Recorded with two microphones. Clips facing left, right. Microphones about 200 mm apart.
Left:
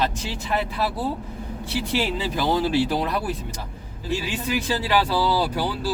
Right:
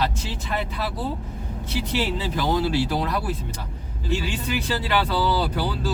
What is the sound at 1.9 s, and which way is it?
Speech, 15° left (ahead or behind).